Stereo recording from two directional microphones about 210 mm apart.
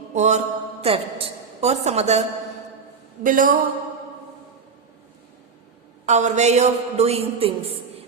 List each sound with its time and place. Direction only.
0.1 s a woman's voice: 35° right (ahead or behind)
3.2 s a woman's voice: 40° right (ahead or behind)
6.1 s a woman's voice: 35° right (ahead or behind)